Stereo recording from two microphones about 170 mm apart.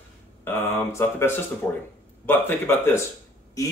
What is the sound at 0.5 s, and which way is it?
Speech, 15° left (ahead or behind).